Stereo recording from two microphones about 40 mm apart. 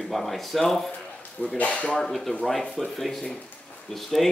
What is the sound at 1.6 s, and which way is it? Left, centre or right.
Speech, left.